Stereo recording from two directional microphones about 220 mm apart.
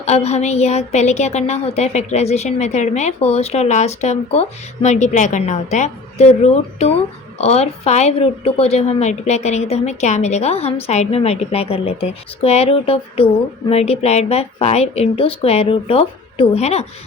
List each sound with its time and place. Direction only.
0.0 s a woman's voice: 30° left (ahead or behind)